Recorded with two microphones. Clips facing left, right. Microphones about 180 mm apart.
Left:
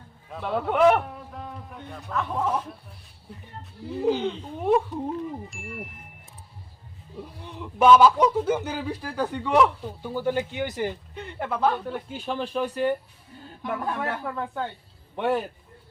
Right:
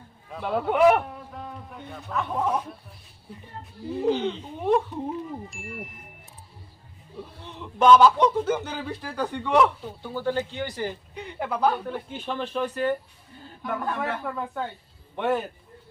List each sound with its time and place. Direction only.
0.3 s a man's voice: centre (ahead or behind)
4.0 s a man's voice: 5° left (ahead or behind)
7.2 s speech: 10° left (ahead or behind)
10.0 s speech: 15° left (ahead or behind)
11.1 s a man's voice: centre (ahead or behind)